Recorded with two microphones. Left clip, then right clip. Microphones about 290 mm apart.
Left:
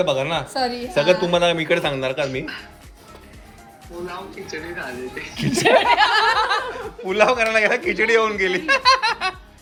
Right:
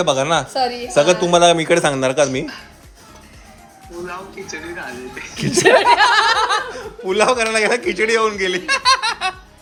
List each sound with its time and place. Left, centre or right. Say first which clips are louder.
0.0 s speech: right 4 dB; centre
5.4 s speech: right 4 dB; centre
5.6 s speech: right 3 dB; right
7.1 s speech: right 1 dB; centre